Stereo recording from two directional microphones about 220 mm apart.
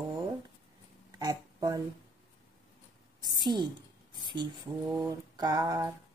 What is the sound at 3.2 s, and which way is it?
Speech, 20° right (ahead or behind).